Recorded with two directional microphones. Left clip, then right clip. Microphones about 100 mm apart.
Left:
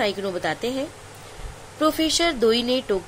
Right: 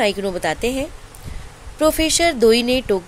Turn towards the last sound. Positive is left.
turn(degrees=-90)